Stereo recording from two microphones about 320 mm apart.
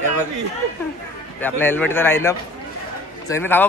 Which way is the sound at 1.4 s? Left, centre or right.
Centre.